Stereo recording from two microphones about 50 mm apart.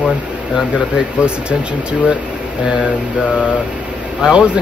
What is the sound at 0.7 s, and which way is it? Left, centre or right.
Speech, centre.